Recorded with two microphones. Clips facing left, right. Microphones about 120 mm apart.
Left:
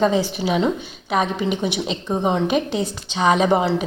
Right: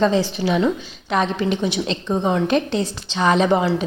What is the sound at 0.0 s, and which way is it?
A woman's voice, 10° left (ahead or behind).